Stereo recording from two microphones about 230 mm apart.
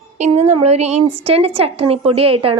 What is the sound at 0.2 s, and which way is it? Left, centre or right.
A woman's voice, right.